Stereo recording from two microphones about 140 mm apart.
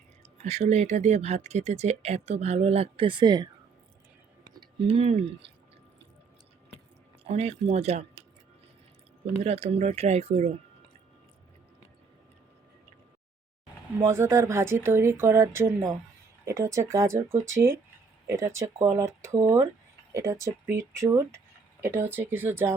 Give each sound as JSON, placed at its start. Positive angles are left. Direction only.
{"t": 0.2, "sound": "speech", "side_deg": -50}
{"t": 4.5, "sound": "speech", "side_deg": -35}
{"t": 7.3, "sound": "speech", "side_deg": -50}
{"t": 9.4, "sound": "speech", "side_deg": -45}
{"t": 14.0, "sound": "speech", "side_deg": -20}